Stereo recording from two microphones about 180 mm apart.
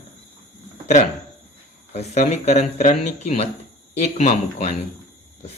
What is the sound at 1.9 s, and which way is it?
Speech, 40° left (ahead or behind).